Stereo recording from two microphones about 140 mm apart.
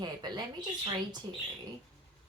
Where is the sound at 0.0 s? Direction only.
30° right (ahead or behind).